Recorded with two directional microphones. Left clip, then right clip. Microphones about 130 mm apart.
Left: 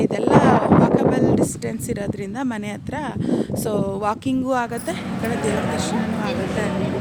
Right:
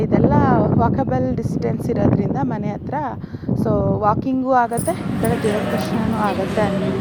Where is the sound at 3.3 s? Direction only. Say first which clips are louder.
Right 1 dB; 20° left (ahead or behind).